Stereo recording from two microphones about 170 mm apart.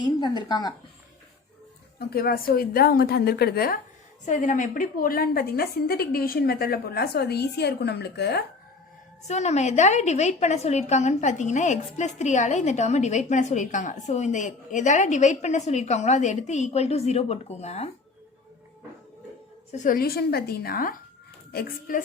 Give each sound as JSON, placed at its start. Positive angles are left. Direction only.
{"t": 0.0, "sound": "speech", "side_deg": 25}
{"t": 2.0, "sound": "a woman's voice", "side_deg": 70}
{"t": 4.3, "sound": "a woman's voice", "side_deg": 50}
{"t": 9.2, "sound": "a woman's voice", "side_deg": 40}
{"t": 19.7, "sound": "a woman's voice", "side_deg": 50}